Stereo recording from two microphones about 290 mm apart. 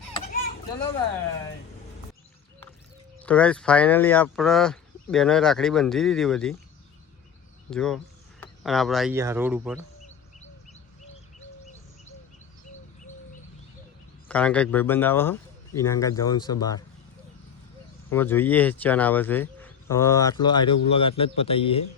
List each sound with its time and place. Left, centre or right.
3.2 s speech: centre
7.7 s speech: centre
10.7 s bird: left
14.3 s speech: centre
18.1 s a man's voice: centre